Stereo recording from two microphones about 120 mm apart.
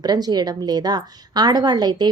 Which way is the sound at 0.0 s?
35° right (ahead or behind).